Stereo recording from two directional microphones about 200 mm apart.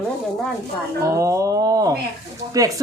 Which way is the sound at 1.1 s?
15° right (ahead or behind).